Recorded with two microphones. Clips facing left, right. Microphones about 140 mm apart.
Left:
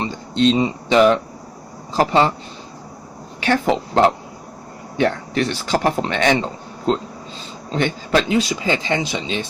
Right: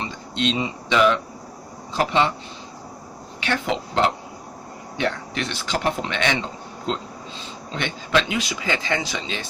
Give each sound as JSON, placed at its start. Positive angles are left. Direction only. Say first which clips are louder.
{"t": 0.0, "sound": "speech", "louder": "left 8 dB", "side_deg": 35}
{"t": 3.4, "sound": "speech", "louder": "left 6 dB", "side_deg": 45}